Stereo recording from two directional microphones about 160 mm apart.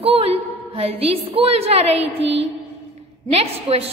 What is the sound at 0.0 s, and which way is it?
A woman's voice, 35° right (ahead or behind).